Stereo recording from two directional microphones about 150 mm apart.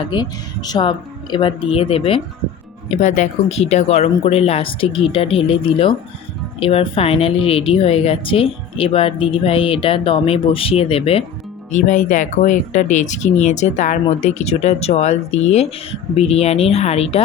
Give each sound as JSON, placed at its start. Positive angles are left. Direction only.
{"t": 0.1, "sound": "a woman's voice", "side_deg": 25}
{"t": 2.9, "sound": "a woman's voice", "side_deg": 55}
{"t": 11.7, "sound": "speech", "side_deg": 55}